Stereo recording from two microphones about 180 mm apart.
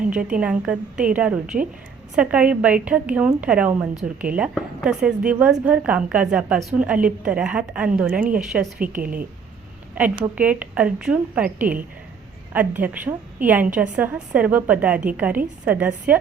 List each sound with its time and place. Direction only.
0.0 s a woman's voice: 5° right (ahead or behind)
9.0 s a woman's voice: 50° right (ahead or behind)
9.9 s a woman's voice: 5° right (ahead or behind)